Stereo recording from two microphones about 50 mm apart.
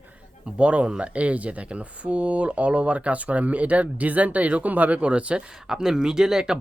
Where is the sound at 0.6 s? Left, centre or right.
Right.